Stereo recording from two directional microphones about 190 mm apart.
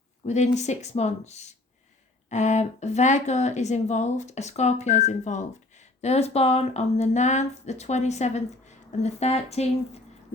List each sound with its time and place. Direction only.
0.3 s speech: 35° left (ahead or behind)